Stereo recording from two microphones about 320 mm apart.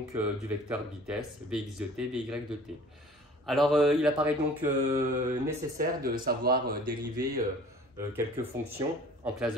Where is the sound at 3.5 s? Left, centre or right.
Centre.